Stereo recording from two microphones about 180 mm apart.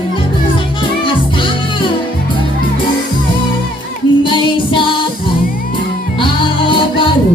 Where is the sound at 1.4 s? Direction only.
25° left (ahead or behind).